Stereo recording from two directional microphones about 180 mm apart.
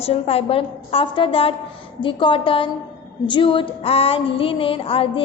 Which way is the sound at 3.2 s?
30° left (ahead or behind).